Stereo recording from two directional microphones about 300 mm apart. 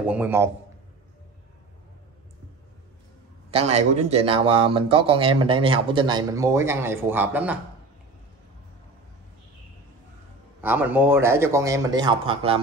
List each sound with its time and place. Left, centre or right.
0.0 s a man's voice: centre
3.5 s speech: right; by 7.5 s centre
10.6 s speech: centre